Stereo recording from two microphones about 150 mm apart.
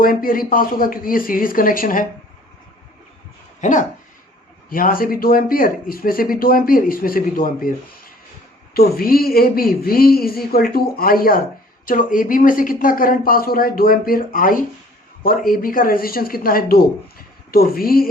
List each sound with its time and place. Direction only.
0.0 s speech: 70° left (ahead or behind)
3.6 s speech: 55° left (ahead or behind)
4.7 s speech: 70° left (ahead or behind)
8.7 s a woman's voice: 85° left
11.9 s a woman's voice: 65° left (ahead or behind); by 18.1 s 80° left